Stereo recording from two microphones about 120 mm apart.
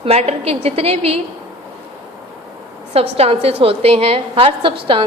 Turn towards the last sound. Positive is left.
turn(degrees=-45)  # may be behind; listen again after turning